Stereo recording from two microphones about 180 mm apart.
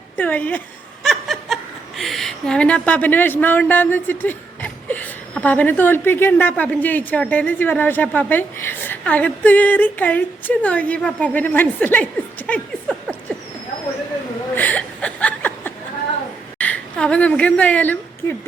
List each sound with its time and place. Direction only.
0.2 s a woman's voice: 10° left (ahead or behind)
1.0 s snicker: centre (ahead or behind)
2.0 s a woman's voice: centre (ahead or behind)
14.5 s chuckle: 10° left (ahead or behind)
16.6 s speech: 10° left (ahead or behind)